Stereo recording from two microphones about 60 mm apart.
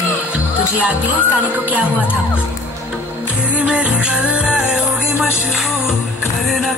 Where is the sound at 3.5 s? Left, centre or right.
Centre.